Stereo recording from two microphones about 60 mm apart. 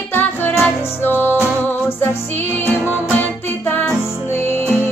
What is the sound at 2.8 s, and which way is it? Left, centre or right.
Music, right.